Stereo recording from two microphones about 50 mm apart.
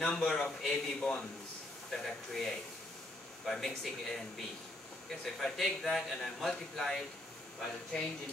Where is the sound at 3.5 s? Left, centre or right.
Centre.